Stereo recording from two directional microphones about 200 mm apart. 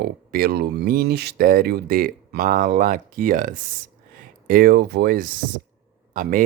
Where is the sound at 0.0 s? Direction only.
45° right (ahead or behind).